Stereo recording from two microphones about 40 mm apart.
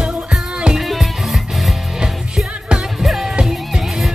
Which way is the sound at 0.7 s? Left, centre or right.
Centre.